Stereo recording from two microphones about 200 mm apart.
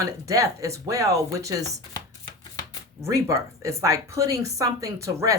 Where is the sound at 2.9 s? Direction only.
15° right (ahead or behind).